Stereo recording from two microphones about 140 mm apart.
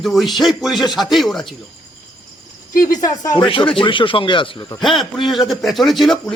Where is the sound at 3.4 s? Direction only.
40° left (ahead or behind).